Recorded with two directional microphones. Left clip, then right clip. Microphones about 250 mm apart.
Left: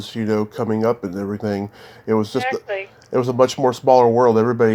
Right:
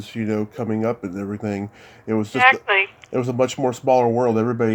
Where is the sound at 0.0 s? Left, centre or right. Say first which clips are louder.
Left 4 dB; centre.